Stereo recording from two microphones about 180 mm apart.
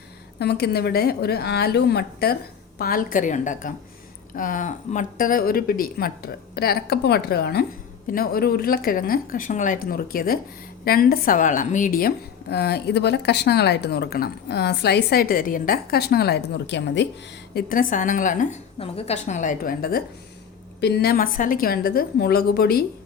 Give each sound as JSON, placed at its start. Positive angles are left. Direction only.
{"t": 0.3, "sound": "a woman's voice", "side_deg": 65}
{"t": 17.5, "sound": "speech", "side_deg": 55}
{"t": 18.8, "sound": "a woman's voice", "side_deg": 35}
{"t": 20.8, "sound": "a woman's voice", "side_deg": 65}